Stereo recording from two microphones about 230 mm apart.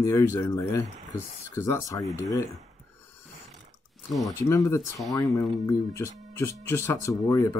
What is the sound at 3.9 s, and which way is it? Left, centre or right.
Speech, centre.